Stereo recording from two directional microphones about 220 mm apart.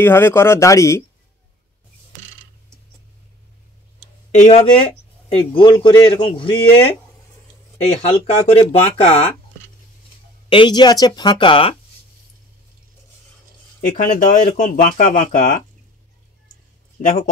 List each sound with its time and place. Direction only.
0.0 s speech: 10° left (ahead or behind)
4.3 s speech: 30° left (ahead or behind)
7.8 s speech: 25° left (ahead or behind)
10.5 s speech: 20° left (ahead or behind)
13.7 s speech: 35° left (ahead or behind)
17.0 s speech: 40° left (ahead or behind)